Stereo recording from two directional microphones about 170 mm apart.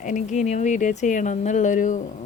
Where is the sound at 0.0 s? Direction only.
45° left (ahead or behind).